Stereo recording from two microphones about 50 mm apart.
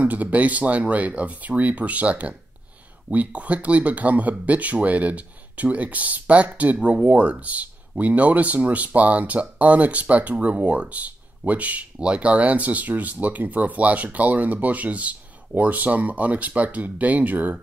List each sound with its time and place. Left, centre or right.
0.0 s speech: right